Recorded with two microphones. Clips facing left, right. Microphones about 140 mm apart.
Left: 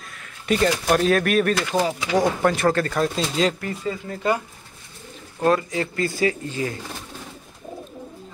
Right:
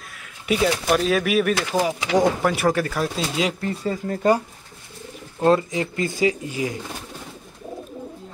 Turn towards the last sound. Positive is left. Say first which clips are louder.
# right 1 dB
turn(degrees=-15)  # may be behind; listen again after turning